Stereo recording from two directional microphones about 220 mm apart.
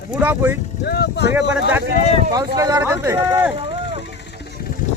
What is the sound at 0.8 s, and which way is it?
Speech, 50° left (ahead or behind).